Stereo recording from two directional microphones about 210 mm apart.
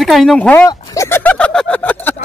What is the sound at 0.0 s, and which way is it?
Speech, centre (ahead or behind).